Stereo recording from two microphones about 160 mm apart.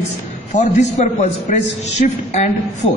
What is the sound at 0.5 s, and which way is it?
A man's voice, 50° left (ahead or behind).